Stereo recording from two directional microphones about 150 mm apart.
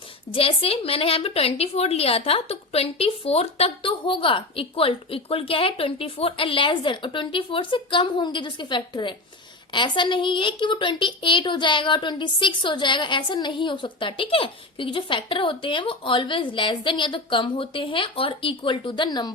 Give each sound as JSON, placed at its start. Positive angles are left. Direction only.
{"t": 0.3, "sound": "a woman's voice", "side_deg": 40}